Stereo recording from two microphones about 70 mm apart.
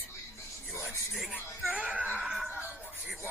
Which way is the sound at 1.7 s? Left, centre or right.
Centre.